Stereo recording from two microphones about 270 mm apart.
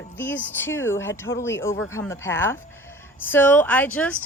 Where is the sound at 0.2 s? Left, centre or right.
Centre.